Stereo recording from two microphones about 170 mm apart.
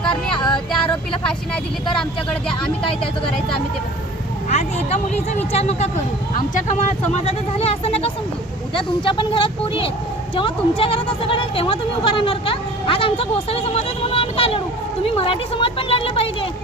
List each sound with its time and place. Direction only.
0.1 s music: 25° left (ahead or behind)
4.4 s speech: 40° left (ahead or behind)